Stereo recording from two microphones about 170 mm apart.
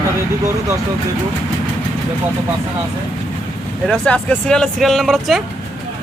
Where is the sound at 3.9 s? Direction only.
5° left (ahead or behind).